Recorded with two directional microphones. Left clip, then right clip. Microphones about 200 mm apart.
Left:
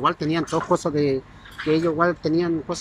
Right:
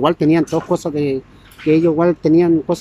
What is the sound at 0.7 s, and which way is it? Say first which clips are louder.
Speech: right 2 dB; 20° right (ahead or behind).